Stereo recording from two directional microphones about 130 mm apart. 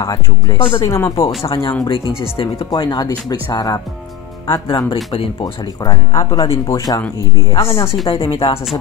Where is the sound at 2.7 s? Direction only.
30° left (ahead or behind).